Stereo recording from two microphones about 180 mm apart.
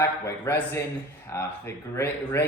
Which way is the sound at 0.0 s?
15° left (ahead or behind).